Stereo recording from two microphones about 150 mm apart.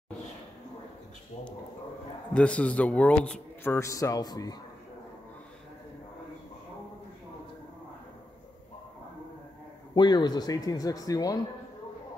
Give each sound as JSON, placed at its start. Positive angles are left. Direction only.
{"t": 2.3, "sound": "a man's voice", "side_deg": 10}
{"t": 9.9, "sound": "speech", "side_deg": 30}